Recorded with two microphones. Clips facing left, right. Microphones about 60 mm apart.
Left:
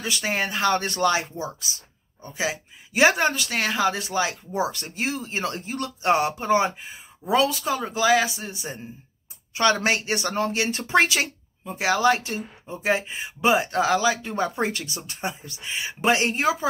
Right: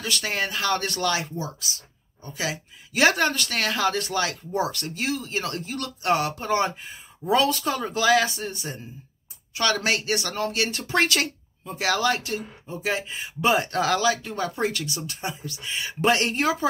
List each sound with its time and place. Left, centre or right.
0.0 s speech: centre
9.5 s speech: left
11.0 s speech: centre